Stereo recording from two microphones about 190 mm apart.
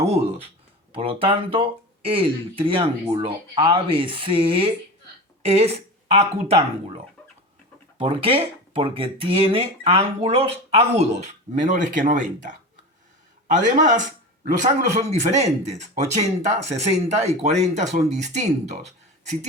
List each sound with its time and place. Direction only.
0.0 s a woman's voice: 35° right (ahead or behind)
7.9 s speech: 30° right (ahead or behind)